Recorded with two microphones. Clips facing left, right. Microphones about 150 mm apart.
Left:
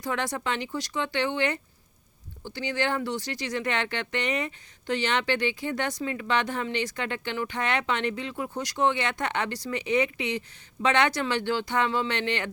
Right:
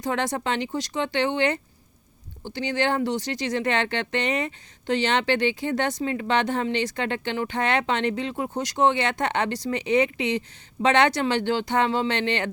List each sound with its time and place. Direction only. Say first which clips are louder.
0.0 s speech: right 4 dB; 25° right (ahead or behind)